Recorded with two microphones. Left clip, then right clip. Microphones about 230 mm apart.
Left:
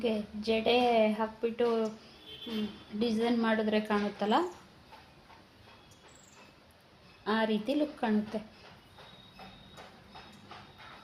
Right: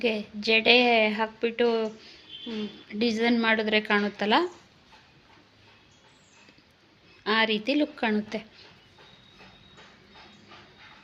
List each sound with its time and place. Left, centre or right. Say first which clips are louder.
0.0 s a woman's voice: right 5 dB; right
3.0 s a woman's voice: right 6 dB; right
7.3 s a woman's voice: right 6 dB; right